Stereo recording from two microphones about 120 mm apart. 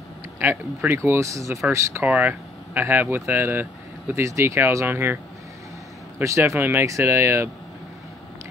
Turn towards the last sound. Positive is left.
turn(degrees=-20)  # may be behind; listen again after turning